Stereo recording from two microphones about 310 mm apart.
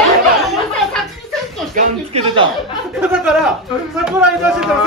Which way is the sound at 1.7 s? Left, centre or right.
Centre.